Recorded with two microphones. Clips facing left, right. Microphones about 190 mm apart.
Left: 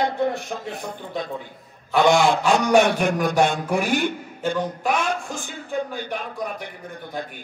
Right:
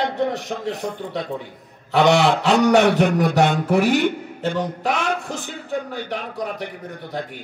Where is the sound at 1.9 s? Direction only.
70° right (ahead or behind).